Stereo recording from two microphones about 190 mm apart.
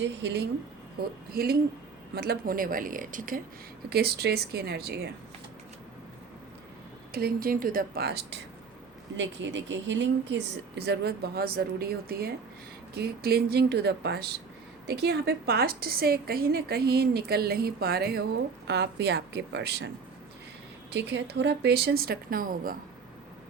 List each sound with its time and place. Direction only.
0.0 s speech: 70° right (ahead or behind)
0.9 s speech: 55° right (ahead or behind)
3.8 s a woman's voice: 55° right (ahead or behind)
7.1 s speech: 55° right (ahead or behind)
9.1 s a woman's voice: 75° right (ahead or behind)
20.9 s a woman's voice: 65° right (ahead or behind); by 22.8 s 50° right (ahead or behind)